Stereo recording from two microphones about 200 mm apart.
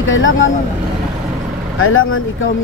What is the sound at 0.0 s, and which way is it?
Speech, 75° left (ahead or behind).